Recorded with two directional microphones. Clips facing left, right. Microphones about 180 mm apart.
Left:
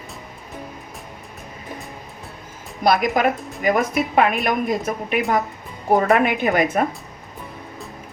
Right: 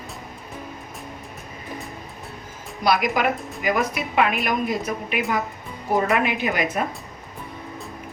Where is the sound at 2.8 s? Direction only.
50° left (ahead or behind).